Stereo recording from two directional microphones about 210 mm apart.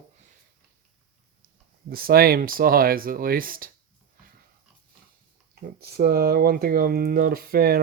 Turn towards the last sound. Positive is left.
turn(degrees=-45)  # may be behind; listen again after turning